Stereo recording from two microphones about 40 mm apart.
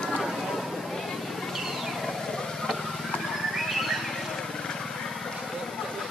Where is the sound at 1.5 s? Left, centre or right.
Centre.